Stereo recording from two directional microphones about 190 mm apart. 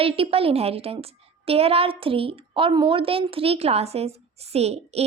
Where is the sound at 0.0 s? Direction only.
30° right (ahead or behind).